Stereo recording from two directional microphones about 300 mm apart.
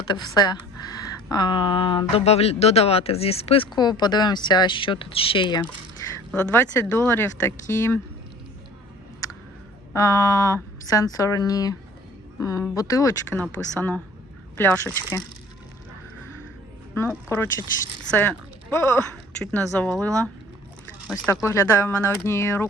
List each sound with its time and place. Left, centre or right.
0.0 s speech: centre
6.0 s a sound: centre
6.3 s speech: centre
9.9 s speech: centre
16.9 s speech: centre